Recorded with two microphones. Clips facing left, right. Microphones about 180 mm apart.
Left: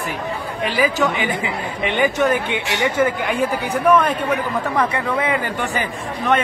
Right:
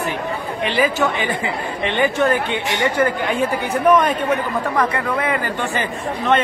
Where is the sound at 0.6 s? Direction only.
5° left (ahead or behind).